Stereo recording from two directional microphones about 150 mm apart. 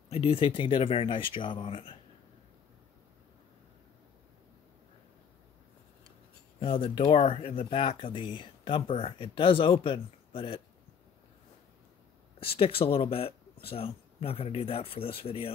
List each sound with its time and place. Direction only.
0.1 s speech: 40° left (ahead or behind)
6.6 s speech: 35° left (ahead or behind)
12.4 s speech: 40° left (ahead or behind)